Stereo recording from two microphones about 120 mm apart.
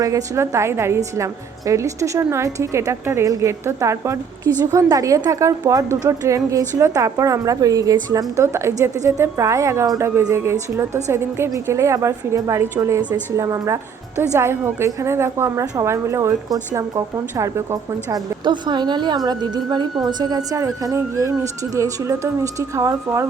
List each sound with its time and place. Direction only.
0.0 s a woman's voice: 25° right (ahead or behind)
18.4 s a woman's voice: 40° right (ahead or behind)